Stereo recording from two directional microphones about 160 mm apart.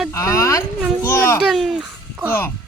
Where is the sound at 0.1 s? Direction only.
20° left (ahead or behind).